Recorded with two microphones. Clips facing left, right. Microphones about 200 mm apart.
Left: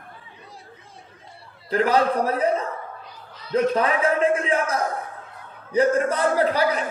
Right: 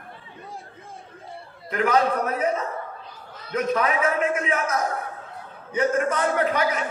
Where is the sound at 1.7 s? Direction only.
30° left (ahead or behind).